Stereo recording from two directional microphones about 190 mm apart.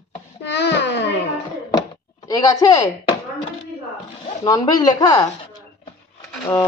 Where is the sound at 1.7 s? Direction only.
20° left (ahead or behind).